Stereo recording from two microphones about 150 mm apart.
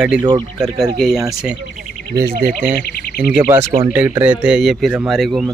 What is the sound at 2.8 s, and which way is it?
Speech, 90° left.